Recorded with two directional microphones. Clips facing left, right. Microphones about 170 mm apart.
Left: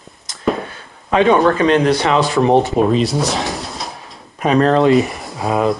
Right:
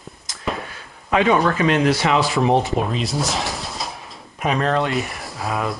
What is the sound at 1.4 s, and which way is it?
Speech, 35° left (ahead or behind).